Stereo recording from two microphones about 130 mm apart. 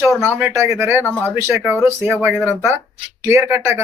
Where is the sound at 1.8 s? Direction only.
15° right (ahead or behind).